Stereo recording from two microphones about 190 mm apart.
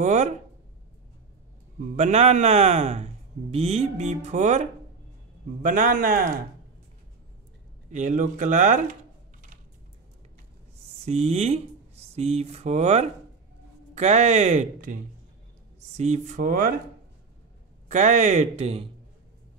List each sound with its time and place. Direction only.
0.0 s a man's voice: 35° right (ahead or behind)
1.8 s a man's voice: 40° right (ahead or behind)
7.9 s a man's voice: 40° right (ahead or behind)
11.1 s a man's voice: 35° right (ahead or behind)
16.0 s a man's voice: 40° right (ahead or behind)
17.8 s a man's voice: 40° right (ahead or behind)